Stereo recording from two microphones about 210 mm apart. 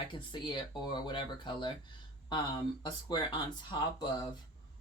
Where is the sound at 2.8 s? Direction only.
20° left (ahead or behind).